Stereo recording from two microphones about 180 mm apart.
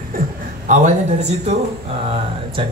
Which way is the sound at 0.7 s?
40° right (ahead or behind).